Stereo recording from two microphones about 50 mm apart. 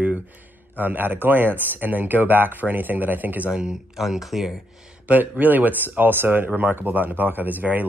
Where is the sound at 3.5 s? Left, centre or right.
Centre.